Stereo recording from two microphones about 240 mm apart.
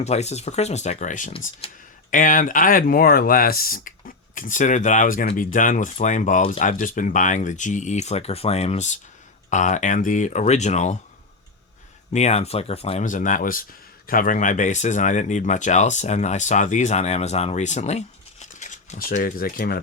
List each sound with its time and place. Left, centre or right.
0.0 s speech: left
12.1 s speech: left